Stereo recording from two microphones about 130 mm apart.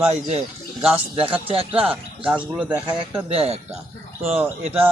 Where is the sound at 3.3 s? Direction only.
50° right (ahead or behind).